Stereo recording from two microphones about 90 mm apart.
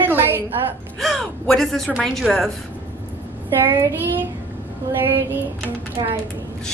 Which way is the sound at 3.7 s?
25° right (ahead or behind).